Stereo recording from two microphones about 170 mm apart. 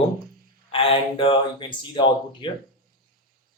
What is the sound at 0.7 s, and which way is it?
Speech, 30° left (ahead or behind).